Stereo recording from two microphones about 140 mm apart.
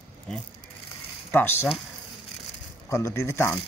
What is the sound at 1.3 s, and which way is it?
Speech, 15° left (ahead or behind).